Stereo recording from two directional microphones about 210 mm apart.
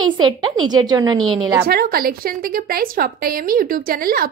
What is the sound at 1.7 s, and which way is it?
A woman's voice, 45° right (ahead or behind).